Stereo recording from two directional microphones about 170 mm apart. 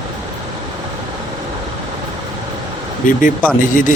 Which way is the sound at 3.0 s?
50° left (ahead or behind).